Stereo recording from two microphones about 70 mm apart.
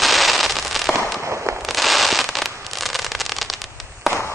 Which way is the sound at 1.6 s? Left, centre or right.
Centre.